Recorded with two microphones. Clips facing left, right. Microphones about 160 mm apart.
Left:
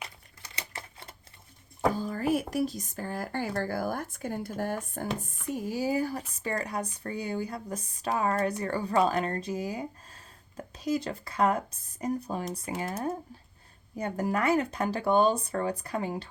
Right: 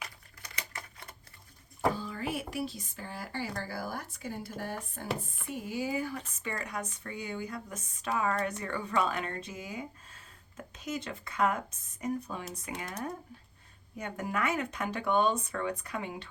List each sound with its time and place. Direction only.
0.0 s typewriter: 30° left (ahead or behind)
2.0 s speech: 45° left (ahead or behind)
5.6 s speech: 40° left (ahead or behind)